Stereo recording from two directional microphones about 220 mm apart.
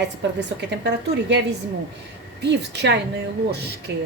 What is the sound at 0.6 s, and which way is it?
Speech, 50° right (ahead or behind).